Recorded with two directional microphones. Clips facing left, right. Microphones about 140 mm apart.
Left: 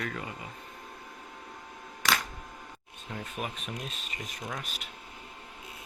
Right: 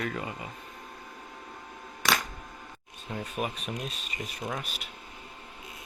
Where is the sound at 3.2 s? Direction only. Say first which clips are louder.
Right 4 dB; 10° right (ahead or behind).